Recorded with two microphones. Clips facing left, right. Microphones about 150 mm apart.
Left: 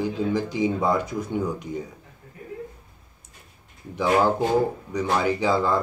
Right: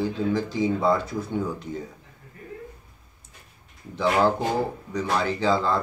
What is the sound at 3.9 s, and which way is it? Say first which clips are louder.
Speech: left 1 dB; 15° left (ahead or behind).